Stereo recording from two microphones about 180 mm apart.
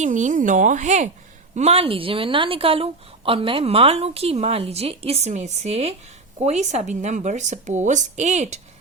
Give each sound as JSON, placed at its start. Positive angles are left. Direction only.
{"t": 0.0, "sound": "a woman's voice", "side_deg": -45}